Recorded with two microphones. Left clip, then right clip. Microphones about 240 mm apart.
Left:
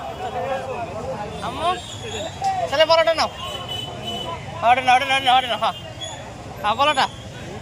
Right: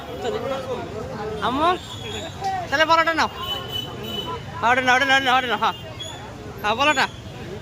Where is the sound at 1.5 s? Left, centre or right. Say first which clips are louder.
Right 3 dB; right.